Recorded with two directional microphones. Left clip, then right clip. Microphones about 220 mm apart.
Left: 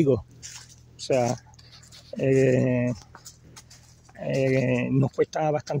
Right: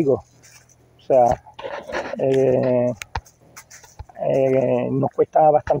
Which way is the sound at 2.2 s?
15° left (ahead or behind).